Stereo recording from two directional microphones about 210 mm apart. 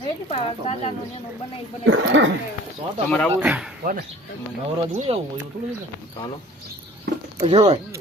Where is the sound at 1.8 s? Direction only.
60° right (ahead or behind).